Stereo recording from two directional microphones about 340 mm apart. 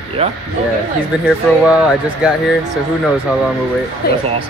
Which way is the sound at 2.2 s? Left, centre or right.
Centre.